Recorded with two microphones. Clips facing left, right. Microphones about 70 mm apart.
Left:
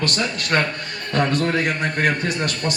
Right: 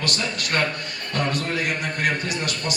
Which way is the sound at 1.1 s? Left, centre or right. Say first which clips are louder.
Left 5 dB; left.